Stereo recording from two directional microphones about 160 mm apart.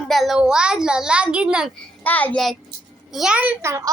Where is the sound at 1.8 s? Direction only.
10° left (ahead or behind).